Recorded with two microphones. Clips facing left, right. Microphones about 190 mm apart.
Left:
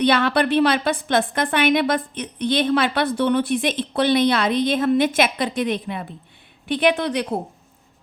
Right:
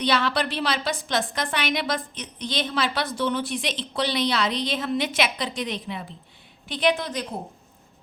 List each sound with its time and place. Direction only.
0.0 s a woman's voice: 55° left (ahead or behind)